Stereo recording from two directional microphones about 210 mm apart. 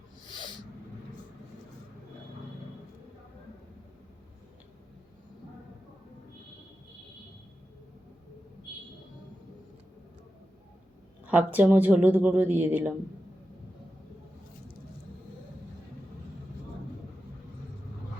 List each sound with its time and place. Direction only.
0.3 s owl: 20° left (ahead or behind)
11.3 s speech: 5° right (ahead or behind)